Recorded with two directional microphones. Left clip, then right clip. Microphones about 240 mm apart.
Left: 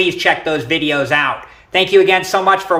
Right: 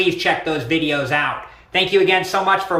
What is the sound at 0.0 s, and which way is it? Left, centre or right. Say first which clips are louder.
Speech: left 4 dB; centre.